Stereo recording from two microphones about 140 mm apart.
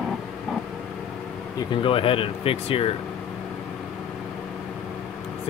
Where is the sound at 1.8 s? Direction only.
40° left (ahead or behind).